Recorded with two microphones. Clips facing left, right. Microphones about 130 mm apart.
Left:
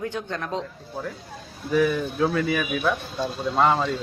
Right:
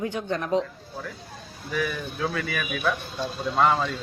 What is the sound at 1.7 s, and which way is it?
Speech, 25° left (ahead or behind).